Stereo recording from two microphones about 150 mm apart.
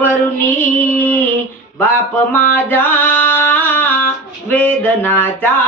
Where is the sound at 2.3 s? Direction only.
15° left (ahead or behind).